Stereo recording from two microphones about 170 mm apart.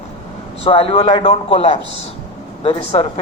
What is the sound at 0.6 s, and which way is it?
Speech, 35° left (ahead or behind).